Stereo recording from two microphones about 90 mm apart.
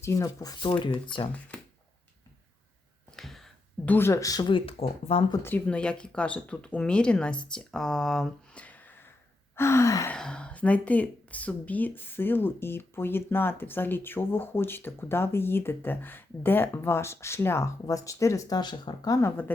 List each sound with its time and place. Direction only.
0.0 s speech: 35° left (ahead or behind)
0.6 s speech: 60° left (ahead or behind)
3.1 s a sound: 5° left (ahead or behind)
3.8 s speech: 25° left (ahead or behind); by 4.4 s 40° left (ahead or behind)
4.4 s speech: 70° left (ahead or behind)
5.4 s speech: 20° left (ahead or behind); by 8.6 s 5° left (ahead or behind)
8.6 s a sound: 20° left (ahead or behind)
9.6 s speech: 30° left (ahead or behind)
10.2 s speech: 10° left (ahead or behind); by 19.2 s 50° left (ahead or behind)